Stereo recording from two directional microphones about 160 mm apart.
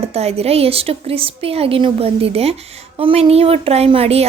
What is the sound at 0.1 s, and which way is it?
A woman's voice, 40° right (ahead or behind).